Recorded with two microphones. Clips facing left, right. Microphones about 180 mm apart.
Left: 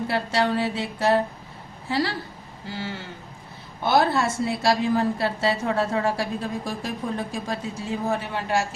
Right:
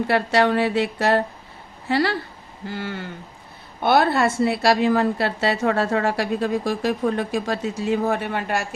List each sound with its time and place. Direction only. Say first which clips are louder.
0.1 s a woman's voice: right 5 dB; 65° right (ahead or behind)